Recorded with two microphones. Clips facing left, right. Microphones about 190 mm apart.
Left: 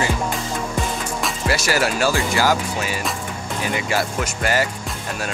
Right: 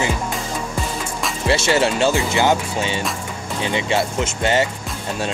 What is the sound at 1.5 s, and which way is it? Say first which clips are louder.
Speech: right 4 dB; 25° right (ahead or behind).